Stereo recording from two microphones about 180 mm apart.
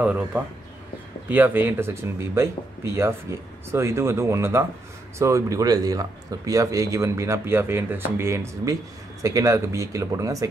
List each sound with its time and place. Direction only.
0.0 s speech: 10° right (ahead or behind)